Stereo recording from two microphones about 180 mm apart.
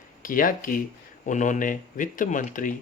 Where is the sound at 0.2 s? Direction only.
50° left (ahead or behind).